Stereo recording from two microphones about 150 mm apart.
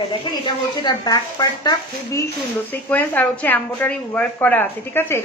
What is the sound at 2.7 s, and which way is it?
A woman's voice, 10° left (ahead or behind).